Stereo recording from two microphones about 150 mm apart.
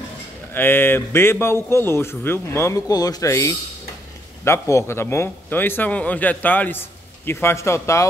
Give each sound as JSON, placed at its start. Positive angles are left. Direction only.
{"t": 0.6, "sound": "speech", "side_deg": 15}